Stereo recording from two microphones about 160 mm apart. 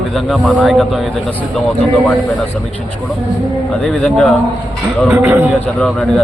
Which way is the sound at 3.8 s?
5° left (ahead or behind).